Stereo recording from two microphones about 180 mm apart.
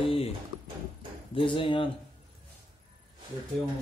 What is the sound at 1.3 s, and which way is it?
Speech, 30° left (ahead or behind).